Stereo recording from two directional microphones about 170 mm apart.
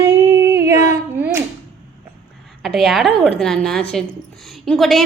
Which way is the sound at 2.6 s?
Centre (ahead or behind).